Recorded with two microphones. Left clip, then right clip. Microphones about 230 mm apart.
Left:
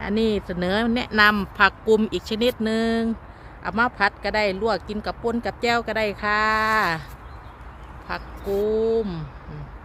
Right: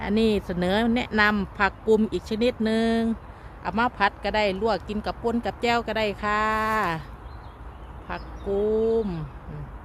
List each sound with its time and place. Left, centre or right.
0.0 s speech: centre
8.1 s speech: centre